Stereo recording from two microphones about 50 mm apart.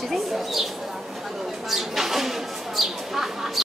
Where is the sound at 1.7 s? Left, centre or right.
Centre.